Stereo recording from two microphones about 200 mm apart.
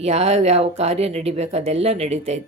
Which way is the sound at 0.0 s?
35° right (ahead or behind).